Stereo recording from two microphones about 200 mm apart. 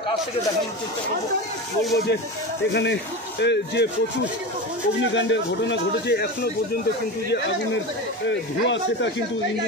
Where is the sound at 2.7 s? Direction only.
60° left (ahead or behind).